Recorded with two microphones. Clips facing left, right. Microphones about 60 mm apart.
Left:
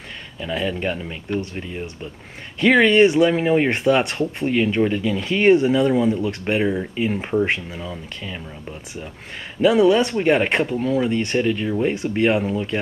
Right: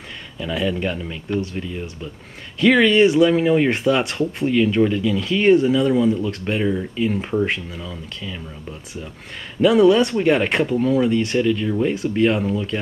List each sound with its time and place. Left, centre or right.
0.4 s speech: centre
1.6 s speech: left
3.7 s speech: centre
4.5 s speech: centre
9.6 s speech: centre
11.3 s speech: centre